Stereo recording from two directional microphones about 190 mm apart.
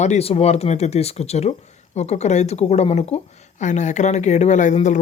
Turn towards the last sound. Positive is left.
turn(degrees=40)  # may be behind; listen again after turning